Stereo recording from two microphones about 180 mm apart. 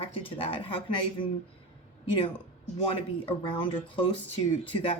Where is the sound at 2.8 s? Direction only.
30° left (ahead or behind).